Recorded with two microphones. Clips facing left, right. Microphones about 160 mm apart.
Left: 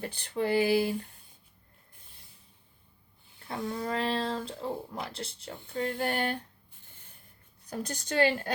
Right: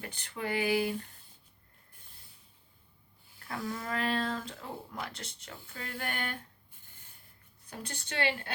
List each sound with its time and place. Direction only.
0.0 s speech: 35° left (ahead or behind)
3.5 s speech: 25° left (ahead or behind)
7.7 s speech: 40° left (ahead or behind)